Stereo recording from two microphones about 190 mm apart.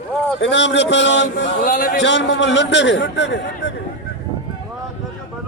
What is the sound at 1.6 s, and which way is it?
A man's voice, 50° left (ahead or behind).